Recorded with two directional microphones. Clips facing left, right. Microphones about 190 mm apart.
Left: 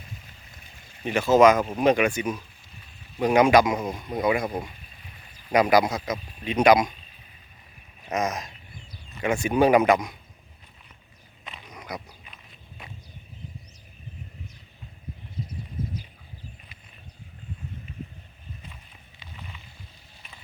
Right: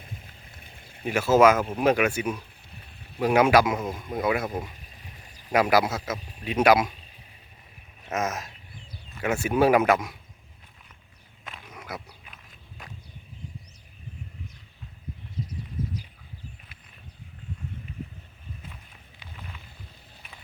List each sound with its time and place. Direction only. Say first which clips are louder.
0.0 s boat: right 1 dB; 55° right (ahead or behind)
1.0 s speech: left 1 dB; 5° right (ahead or behind)
2.7 s a sound: right 2 dB; 60° right (ahead or behind)
3.2 s a man's voice: left 2 dB; 5° right (ahead or behind)
5.5 s a man's voice: left 2 dB; 5° right (ahead or behind)
8.0 s a sound: left 2 dB; 5° right (ahead or behind)
9.1 s a man's voice: left 1 dB; 5° right (ahead or behind)
11.4 s wild animals: left 1 dB; 5° right (ahead or behind)
19.2 s a sound: even; 5° right (ahead or behind)